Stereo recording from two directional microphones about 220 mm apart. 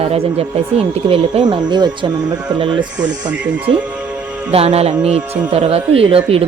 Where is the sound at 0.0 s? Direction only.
25° right (ahead or behind).